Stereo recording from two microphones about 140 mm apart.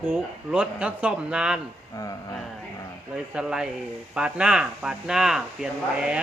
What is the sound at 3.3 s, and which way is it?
A man's voice, 5° right (ahead or behind).